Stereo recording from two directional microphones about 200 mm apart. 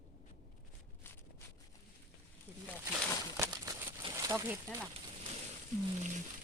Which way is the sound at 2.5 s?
10° right (ahead or behind).